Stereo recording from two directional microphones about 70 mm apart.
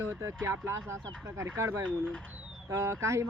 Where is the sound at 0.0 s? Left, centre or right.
Right.